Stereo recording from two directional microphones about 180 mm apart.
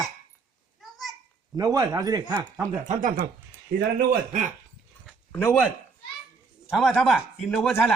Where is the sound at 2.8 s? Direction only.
45° right (ahead or behind).